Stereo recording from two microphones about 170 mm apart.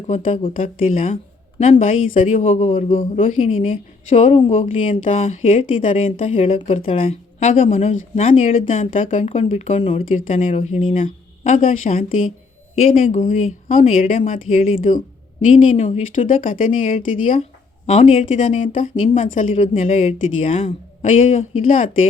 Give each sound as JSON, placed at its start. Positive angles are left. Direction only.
{"t": 0.1, "sound": "a woman's voice", "side_deg": 45}
{"t": 2.0, "sound": "speech", "side_deg": 50}
{"t": 2.3, "sound": "a woman's voice", "side_deg": 35}
{"t": 3.2, "sound": "speech", "side_deg": 45}
{"t": 4.4, "sound": "a woman's voice", "side_deg": 30}
{"t": 8.7, "sound": "a woman's voice", "side_deg": 35}
{"t": 9.0, "sound": "speech", "side_deg": 50}
{"t": 9.3, "sound": "a woman's voice", "side_deg": 35}
{"t": 10.9, "sound": "speech", "side_deg": 50}
{"t": 12.9, "sound": "speech", "side_deg": 50}
{"t": 17.8, "sound": "a woman's voice", "side_deg": 40}
{"t": 21.6, "sound": "speech", "side_deg": 50}